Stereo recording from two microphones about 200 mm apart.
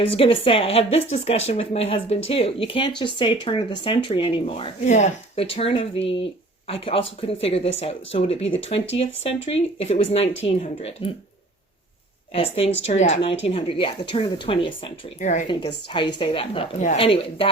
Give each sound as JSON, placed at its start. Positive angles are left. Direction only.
{"t": 0.0, "sound": "speech", "side_deg": 25}
{"t": 12.3, "sound": "speech", "side_deg": 30}
{"t": 15.2, "sound": "speech", "side_deg": 40}
{"t": 15.4, "sound": "speech", "side_deg": 25}